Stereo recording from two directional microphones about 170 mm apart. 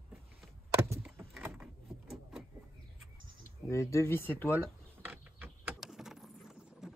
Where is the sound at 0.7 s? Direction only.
15° right (ahead or behind).